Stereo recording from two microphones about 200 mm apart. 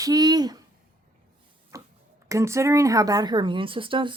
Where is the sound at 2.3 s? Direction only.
15° right (ahead or behind).